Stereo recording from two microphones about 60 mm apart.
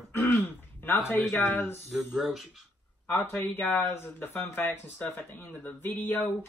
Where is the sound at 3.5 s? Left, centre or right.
Left.